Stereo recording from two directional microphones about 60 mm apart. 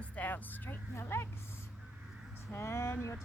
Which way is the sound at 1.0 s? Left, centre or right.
Left.